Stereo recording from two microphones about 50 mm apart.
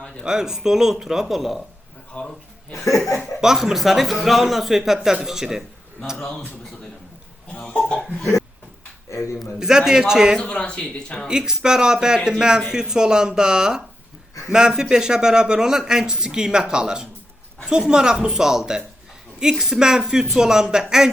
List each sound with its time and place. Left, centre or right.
0.3 s speech: centre
2.1 s speech: left
2.7 s laughter: left
3.4 s speech: centre
7.7 s chuckle: centre
9.6 s speech: centre
10.4 s speech: left
11.3 s speech: centre